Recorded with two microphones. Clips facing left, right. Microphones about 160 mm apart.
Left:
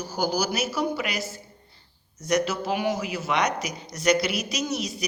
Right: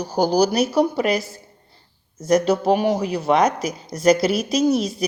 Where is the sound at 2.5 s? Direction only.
40° right (ahead or behind).